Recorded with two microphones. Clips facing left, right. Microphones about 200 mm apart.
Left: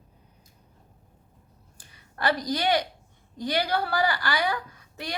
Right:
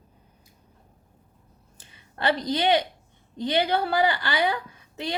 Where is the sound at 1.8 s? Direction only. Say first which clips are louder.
Even; 25° right (ahead or behind).